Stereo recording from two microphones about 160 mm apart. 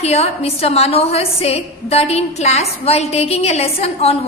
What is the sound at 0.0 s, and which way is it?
A woman's voice, 40° left (ahead or behind).